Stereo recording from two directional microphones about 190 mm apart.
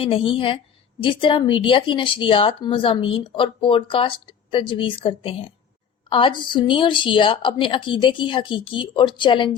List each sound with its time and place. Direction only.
0.0 s speech: 30° left (ahead or behind)